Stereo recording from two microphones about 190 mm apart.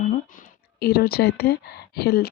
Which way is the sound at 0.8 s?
55° left (ahead or behind).